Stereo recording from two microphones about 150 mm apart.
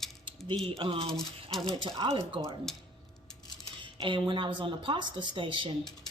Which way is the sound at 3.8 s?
35° right (ahead or behind).